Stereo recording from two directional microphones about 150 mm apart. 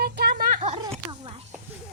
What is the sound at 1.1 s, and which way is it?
Speech, 30° right (ahead or behind).